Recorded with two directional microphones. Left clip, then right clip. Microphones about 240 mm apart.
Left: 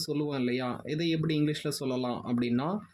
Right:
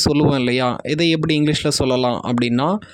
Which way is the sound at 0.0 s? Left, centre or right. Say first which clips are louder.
Right 15 dB; right.